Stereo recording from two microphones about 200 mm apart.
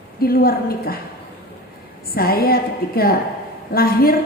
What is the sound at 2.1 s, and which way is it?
A woman's voice, 50° left (ahead or behind).